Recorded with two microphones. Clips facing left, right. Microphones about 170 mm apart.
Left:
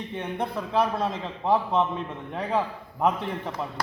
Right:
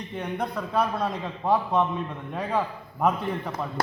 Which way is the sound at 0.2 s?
25° left (ahead or behind).